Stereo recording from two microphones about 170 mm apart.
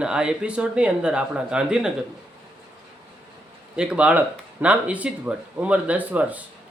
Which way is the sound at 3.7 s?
5° right (ahead or behind).